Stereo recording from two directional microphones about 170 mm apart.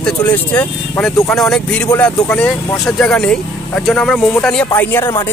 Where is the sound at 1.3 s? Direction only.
5° left (ahead or behind).